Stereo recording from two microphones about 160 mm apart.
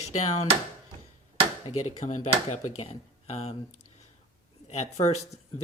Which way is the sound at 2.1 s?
50° left (ahead or behind).